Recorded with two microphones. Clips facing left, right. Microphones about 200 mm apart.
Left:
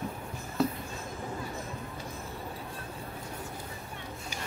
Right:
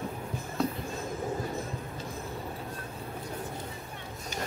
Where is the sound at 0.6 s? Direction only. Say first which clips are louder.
Left 2 dB; 5° left (ahead or behind).